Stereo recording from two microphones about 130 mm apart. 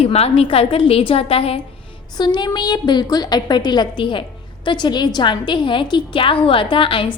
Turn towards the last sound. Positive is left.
turn(degrees=40)  # may be behind; listen again after turning